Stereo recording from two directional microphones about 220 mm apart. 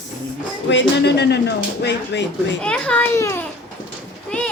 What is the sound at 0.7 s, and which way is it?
Speech, 50° left (ahead or behind).